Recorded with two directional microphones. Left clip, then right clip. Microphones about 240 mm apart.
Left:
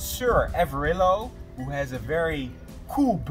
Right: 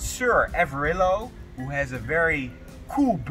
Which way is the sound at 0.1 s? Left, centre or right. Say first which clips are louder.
Right 2 dB; centre.